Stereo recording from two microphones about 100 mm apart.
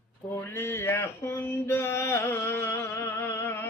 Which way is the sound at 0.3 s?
25° left (ahead or behind).